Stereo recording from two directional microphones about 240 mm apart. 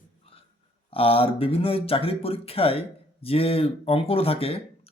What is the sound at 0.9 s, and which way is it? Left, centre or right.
Speech, left.